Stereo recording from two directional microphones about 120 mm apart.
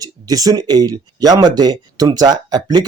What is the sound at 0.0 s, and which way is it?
Speech, 30° right (ahead or behind).